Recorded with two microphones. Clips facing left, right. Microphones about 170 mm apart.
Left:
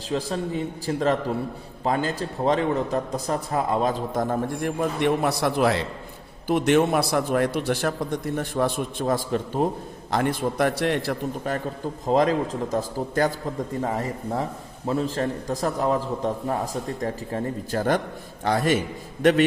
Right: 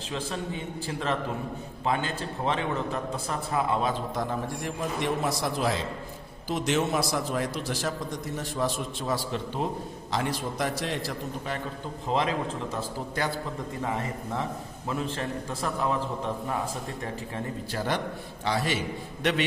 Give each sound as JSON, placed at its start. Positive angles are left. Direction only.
{"t": 0.1, "sound": "a man's voice", "side_deg": 40}